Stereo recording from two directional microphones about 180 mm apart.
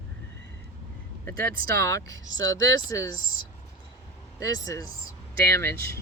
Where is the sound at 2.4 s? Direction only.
90° right.